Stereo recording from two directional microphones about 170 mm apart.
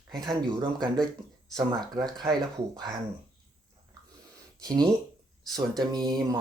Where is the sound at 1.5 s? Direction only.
20° right (ahead or behind).